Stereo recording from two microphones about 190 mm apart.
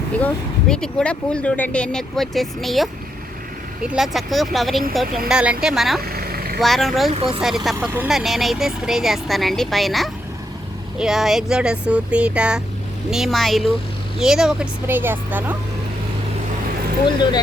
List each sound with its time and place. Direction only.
0.7 s speech: 5° left (ahead or behind)
6.1 s vehicle: 50° right (ahead or behind)
6.6 s speech: centre (ahead or behind)
7.1 s speech: 30° right (ahead or behind)
7.4 s speech: centre (ahead or behind)
17.1 s speech: 25° left (ahead or behind)